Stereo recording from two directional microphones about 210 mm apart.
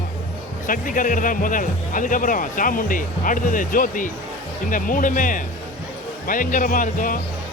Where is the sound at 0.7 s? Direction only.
40° left (ahead or behind).